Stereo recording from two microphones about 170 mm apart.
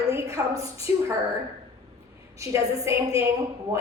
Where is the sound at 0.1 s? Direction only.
15° right (ahead or behind).